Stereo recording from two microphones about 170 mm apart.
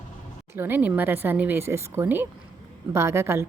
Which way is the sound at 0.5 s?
10° right (ahead or behind).